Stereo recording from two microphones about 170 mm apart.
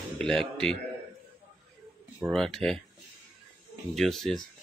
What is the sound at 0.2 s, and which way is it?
Speech, 5° left (ahead or behind).